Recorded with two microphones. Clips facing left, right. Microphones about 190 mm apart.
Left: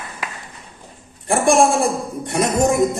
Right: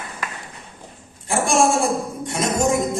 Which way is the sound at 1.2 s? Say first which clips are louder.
Left 4 dB; 60° left (ahead or behind).